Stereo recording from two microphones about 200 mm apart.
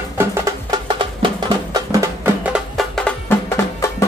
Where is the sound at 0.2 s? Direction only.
15° right (ahead or behind).